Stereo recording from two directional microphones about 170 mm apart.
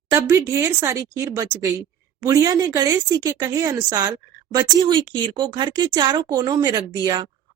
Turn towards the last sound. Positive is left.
turn(degrees=-25)  # may be behind; listen again after turning